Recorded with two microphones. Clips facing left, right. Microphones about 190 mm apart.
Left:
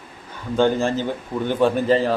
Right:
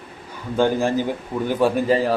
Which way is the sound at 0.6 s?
15° right (ahead or behind).